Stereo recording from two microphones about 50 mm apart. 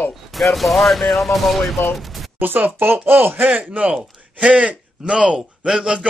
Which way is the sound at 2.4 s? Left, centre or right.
Right.